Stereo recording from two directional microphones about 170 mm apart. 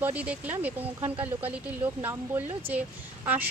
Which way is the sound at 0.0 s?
10° right (ahead or behind).